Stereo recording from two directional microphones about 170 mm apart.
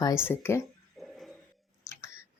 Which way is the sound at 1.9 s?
15° left (ahead or behind).